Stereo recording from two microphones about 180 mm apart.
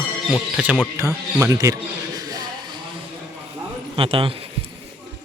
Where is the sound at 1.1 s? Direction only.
15° right (ahead or behind).